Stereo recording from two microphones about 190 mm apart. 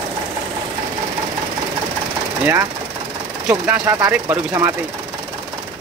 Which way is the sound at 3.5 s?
15° right (ahead or behind).